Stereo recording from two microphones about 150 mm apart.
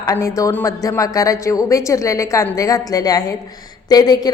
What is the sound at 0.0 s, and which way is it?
A woman's voice, 20° left (ahead or behind).